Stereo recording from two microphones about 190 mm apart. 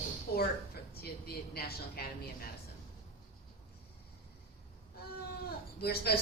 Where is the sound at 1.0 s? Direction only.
55° left (ahead or behind).